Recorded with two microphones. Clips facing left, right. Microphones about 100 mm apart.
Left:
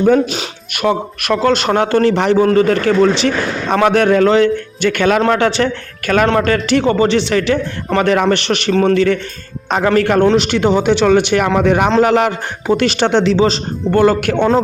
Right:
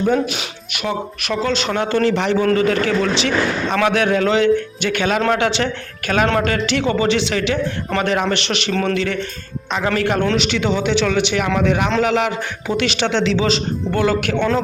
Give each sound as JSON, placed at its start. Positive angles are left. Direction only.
{"t": 0.7, "sound": "a man's voice", "side_deg": 55}
{"t": 2.4, "sound": "a man's voice", "side_deg": 30}
{"t": 2.6, "sound": "a man's voice", "side_deg": 45}